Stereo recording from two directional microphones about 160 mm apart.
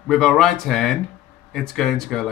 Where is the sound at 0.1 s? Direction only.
Centre (ahead or behind).